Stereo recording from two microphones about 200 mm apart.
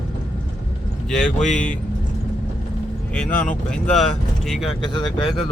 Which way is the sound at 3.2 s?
10° left (ahead or behind).